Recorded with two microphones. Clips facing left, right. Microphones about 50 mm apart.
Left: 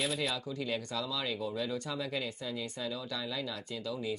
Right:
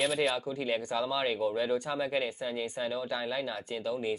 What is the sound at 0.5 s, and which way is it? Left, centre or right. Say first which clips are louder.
Speech: right 4 dB; right.